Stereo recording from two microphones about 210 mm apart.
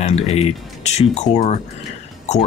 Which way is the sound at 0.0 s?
30° left (ahead or behind).